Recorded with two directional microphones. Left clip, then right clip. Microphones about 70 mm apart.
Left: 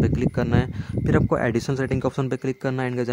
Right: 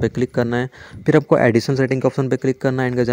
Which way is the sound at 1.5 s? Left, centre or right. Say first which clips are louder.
Right 7 dB; right.